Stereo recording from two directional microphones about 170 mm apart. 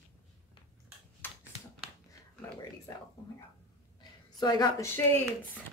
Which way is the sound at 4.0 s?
25° left (ahead or behind).